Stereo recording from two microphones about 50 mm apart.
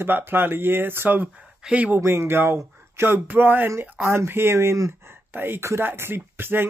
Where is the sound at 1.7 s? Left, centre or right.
Right.